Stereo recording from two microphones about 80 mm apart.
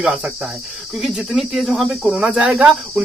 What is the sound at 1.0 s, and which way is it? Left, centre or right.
Cricket, centre.